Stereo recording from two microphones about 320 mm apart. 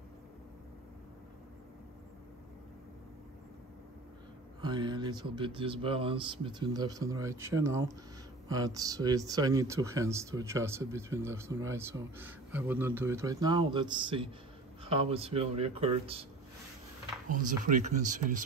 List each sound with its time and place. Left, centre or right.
4.6 s speech: centre
17.4 s speech: right